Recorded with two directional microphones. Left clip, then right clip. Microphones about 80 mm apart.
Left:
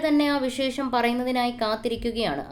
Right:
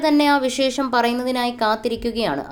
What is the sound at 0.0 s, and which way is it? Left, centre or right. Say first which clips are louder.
A woman's voice: right 6 dB; right.